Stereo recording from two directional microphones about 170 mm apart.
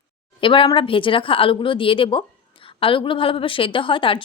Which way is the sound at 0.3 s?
30° left (ahead or behind).